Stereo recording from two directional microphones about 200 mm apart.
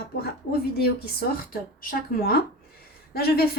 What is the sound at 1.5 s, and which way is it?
A woman's voice, 45° left (ahead or behind).